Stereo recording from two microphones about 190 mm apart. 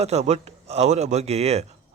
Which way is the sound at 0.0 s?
35° right (ahead or behind).